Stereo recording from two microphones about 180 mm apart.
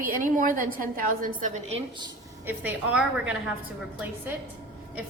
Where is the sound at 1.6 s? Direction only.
35° right (ahead or behind).